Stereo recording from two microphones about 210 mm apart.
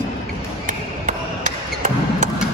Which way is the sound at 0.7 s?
40° right (ahead or behind).